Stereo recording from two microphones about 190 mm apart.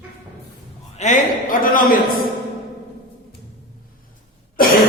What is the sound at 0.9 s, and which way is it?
A man's voice, 40° left (ahead or behind).